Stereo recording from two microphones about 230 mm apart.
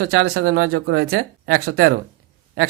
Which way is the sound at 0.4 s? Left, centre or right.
Right.